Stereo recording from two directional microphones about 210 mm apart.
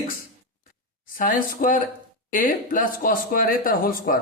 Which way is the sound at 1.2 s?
40° left (ahead or behind).